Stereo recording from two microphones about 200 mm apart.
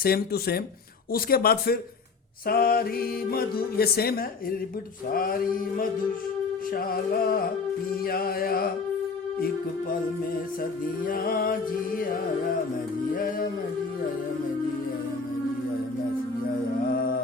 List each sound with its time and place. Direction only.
0.0 s music: 50° left (ahead or behind)
10.6 s music: 45° left (ahead or behind)